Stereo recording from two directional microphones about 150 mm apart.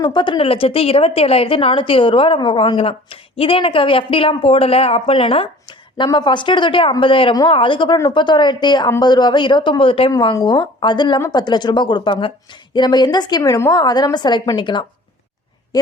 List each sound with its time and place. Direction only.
0.0 s a woman's voice: 30° left (ahead or behind)
10.1 s a woman's voice: 25° left (ahead or behind)